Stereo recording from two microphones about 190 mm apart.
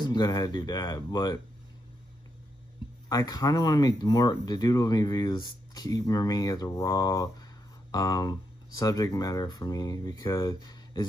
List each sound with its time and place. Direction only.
0.0 s speech: 20° left (ahead or behind)
3.1 s speech: 20° left (ahead or behind)